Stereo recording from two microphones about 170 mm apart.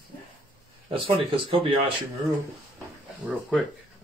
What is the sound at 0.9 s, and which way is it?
Speech, 30° right (ahead or behind).